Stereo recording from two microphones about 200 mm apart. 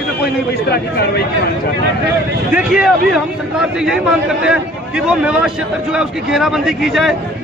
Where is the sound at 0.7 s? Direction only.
55° left (ahead or behind).